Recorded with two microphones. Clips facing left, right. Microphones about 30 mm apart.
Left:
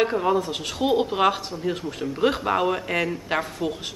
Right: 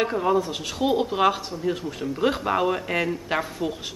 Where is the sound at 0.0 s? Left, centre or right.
Centre.